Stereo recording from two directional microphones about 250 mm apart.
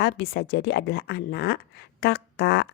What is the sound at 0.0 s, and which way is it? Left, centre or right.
A woman's voice, left.